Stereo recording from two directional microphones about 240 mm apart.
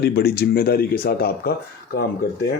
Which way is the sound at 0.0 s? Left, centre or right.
Left.